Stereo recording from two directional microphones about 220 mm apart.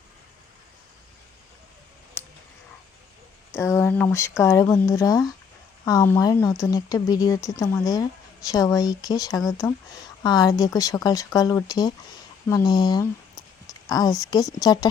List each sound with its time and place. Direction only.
3.5 s speech: 10° left (ahead or behind)